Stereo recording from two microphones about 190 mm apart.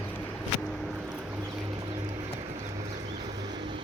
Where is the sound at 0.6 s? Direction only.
Centre (ahead or behind).